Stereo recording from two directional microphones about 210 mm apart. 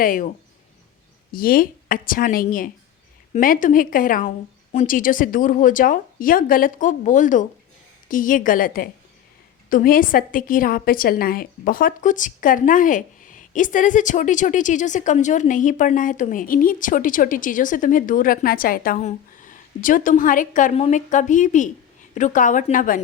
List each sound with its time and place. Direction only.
0.0 s a woman's voice: 40° left (ahead or behind)
1.3 s a woman's voice: 45° left (ahead or behind)